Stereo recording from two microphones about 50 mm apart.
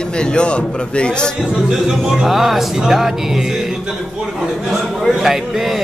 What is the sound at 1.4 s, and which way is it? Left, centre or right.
A man's voice, centre.